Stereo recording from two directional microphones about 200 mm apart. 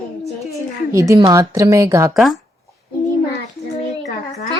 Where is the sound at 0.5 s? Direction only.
15° right (ahead or behind).